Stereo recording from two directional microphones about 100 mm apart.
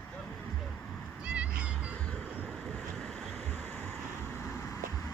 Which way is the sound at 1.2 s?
10° right (ahead or behind).